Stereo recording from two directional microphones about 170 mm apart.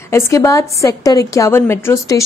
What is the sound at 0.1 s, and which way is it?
A woman's voice, 15° left (ahead or behind).